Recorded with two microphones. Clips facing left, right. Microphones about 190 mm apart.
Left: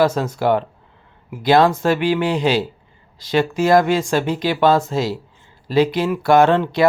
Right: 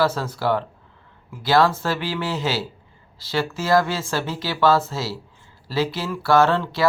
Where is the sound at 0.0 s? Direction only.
20° left (ahead or behind).